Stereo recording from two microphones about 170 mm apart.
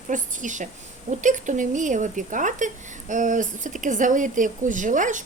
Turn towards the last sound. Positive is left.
turn(degrees=-50)  # may be behind; listen again after turning